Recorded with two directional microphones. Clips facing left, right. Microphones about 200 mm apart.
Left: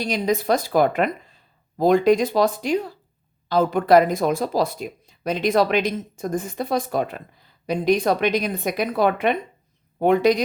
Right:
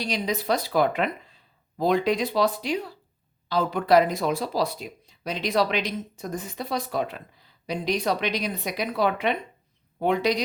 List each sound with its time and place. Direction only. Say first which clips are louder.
0.0 s speech: left 6 dB; 50° left (ahead or behind)